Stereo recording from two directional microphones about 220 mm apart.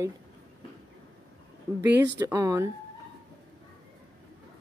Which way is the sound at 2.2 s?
15° right (ahead or behind).